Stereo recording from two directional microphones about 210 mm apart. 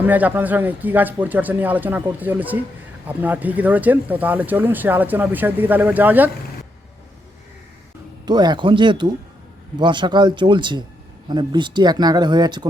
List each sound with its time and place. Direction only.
0.0 s speech: 10° right (ahead or behind)
8.2 s speech: 20° right (ahead or behind)